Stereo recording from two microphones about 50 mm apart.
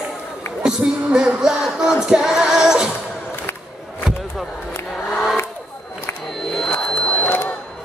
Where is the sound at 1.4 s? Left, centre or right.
Centre.